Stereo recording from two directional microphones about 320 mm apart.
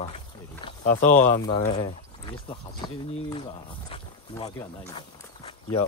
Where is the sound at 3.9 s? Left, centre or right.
Centre.